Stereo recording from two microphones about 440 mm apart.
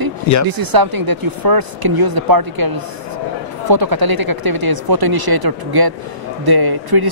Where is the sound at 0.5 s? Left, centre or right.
Right.